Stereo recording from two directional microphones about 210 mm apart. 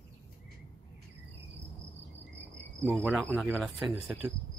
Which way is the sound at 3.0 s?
10° right (ahead or behind).